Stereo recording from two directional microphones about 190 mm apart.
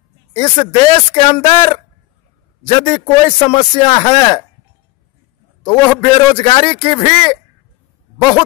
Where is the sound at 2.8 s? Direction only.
30° left (ahead or behind).